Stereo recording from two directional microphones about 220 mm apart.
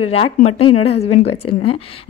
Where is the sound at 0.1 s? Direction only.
30° left (ahead or behind).